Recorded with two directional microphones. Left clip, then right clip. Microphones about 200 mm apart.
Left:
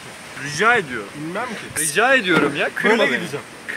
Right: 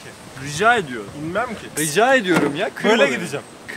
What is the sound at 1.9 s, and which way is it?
Speech, 65° right (ahead or behind).